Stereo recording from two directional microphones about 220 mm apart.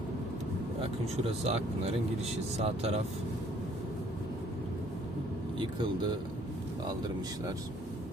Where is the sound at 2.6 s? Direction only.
30° right (ahead or behind).